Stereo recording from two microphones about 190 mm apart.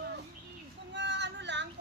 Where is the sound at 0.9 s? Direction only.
65° right (ahead or behind).